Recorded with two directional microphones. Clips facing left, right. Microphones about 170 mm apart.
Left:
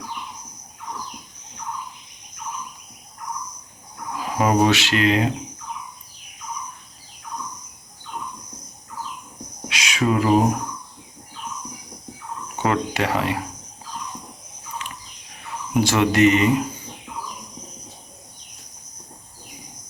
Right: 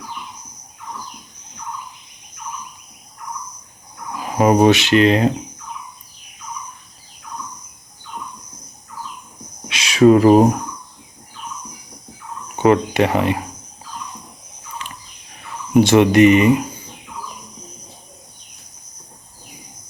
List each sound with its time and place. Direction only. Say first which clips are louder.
4.4 s speech: right 5 dB; 20° right (ahead or behind)
5.0 s speech: right 2 dB; 35° right (ahead or behind)
9.6 s insect: right 11 dB; 30° right (ahead or behind)
12.5 s speech: right 8 dB; 20° right (ahead or behind)
15.8 s speech: right 6 dB; 20° right (ahead or behind)